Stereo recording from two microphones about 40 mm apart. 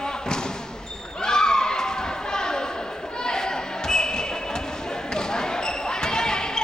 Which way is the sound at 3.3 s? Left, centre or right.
Centre.